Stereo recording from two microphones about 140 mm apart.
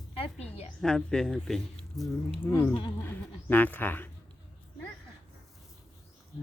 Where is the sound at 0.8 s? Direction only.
5° left (ahead or behind).